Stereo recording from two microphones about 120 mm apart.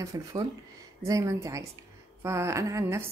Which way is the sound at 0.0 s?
25° right (ahead or behind).